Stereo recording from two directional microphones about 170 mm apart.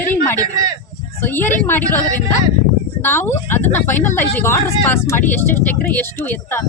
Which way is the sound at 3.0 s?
10° left (ahead or behind).